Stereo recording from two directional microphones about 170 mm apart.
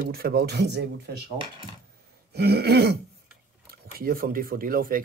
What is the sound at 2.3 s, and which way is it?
Throat clearing, 70° right (ahead or behind).